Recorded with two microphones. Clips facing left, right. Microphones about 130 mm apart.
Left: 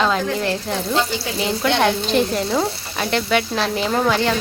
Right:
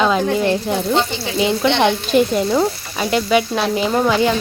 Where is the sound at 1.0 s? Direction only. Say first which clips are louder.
Right 2 dB; centre (ahead or behind).